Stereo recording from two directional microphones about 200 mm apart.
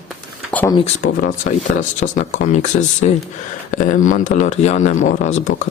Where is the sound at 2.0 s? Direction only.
35° left (ahead or behind).